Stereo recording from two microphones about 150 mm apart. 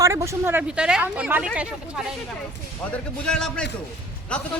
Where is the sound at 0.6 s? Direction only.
5° right (ahead or behind).